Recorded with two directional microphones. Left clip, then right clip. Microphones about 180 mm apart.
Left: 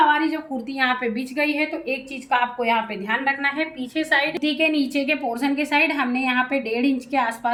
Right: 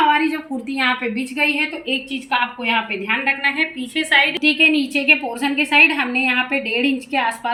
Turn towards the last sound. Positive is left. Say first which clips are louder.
# right 2 dB
turn(degrees=15)  # may be behind; listen again after turning